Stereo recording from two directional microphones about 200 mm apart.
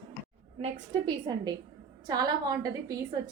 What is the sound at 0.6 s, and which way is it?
A woman's voice, 25° right (ahead or behind).